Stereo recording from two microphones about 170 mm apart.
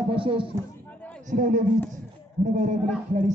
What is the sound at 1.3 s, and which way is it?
Speech, 50° right (ahead or behind).